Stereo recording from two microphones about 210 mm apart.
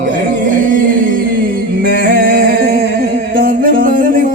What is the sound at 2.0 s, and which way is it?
Music, 45° right (ahead or behind).